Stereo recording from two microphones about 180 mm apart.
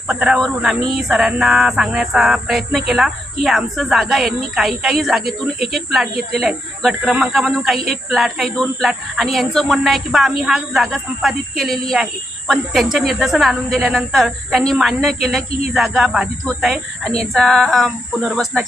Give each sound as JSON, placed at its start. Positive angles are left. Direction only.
{"t": 0.1, "sound": "speech", "side_deg": 0}